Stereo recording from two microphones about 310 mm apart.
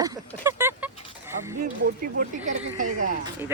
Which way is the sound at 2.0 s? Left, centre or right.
Right.